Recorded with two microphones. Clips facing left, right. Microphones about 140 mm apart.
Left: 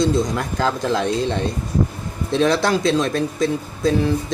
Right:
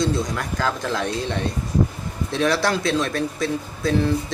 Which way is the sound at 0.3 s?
25° left (ahead or behind).